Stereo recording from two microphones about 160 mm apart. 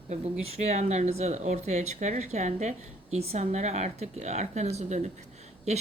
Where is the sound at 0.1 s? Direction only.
40° right (ahead or behind).